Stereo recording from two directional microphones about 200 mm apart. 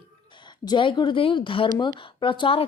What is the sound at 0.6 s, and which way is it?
Speech, 20° left (ahead or behind).